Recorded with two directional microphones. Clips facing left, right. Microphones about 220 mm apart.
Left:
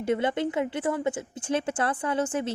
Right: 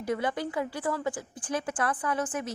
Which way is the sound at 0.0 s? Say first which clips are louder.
Left 4 dB; 25° left (ahead or behind).